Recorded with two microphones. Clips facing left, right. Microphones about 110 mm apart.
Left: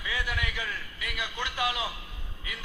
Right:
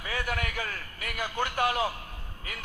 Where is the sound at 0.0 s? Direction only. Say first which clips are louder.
Right 1 dB; 45° right (ahead or behind).